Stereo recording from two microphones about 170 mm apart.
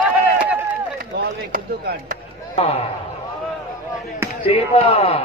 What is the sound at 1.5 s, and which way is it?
Speech, 60° right (ahead or behind).